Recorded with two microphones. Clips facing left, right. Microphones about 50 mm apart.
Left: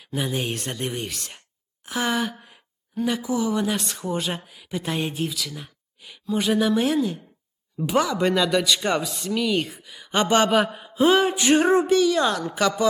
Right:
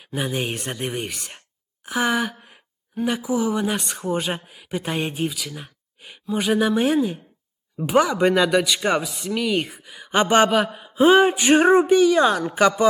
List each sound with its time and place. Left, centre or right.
0.1 s speech: centre
10.5 s mantra: centre
10.9 s a woman's voice: right